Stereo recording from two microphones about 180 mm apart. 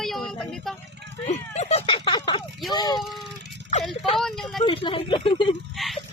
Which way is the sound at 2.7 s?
25° left (ahead or behind).